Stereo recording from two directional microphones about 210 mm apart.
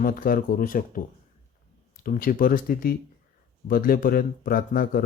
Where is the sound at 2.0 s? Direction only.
45° left (ahead or behind).